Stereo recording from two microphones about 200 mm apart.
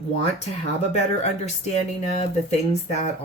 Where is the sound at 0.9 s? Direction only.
35° left (ahead or behind).